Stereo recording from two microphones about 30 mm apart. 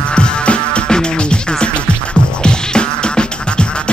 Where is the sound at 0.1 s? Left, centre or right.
Left.